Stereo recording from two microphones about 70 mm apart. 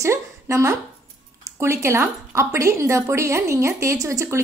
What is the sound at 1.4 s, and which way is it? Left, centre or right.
Speech, right.